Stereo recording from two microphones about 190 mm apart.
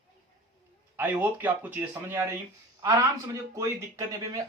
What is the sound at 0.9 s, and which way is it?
Speech, 10° right (ahead or behind).